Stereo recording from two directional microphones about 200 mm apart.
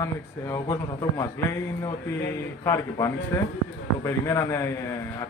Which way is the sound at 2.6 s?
15° left (ahead or behind).